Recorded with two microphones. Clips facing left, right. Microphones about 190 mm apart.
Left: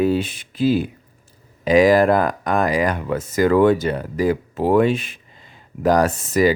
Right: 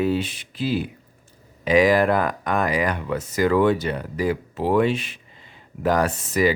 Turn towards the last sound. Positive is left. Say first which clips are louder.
# left 4 dB
turn(degrees=45)  # may be behind; listen again after turning